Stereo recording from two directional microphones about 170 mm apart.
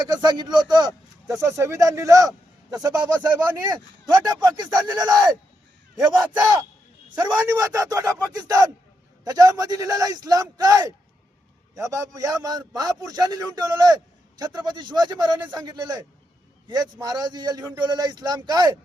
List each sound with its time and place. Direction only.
0.0 s a man's voice: 25° right (ahead or behind)
4.1 s a man's voice: 25° right (ahead or behind)